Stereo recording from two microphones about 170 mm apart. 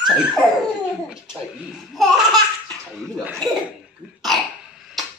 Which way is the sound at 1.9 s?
Centre (ahead or behind).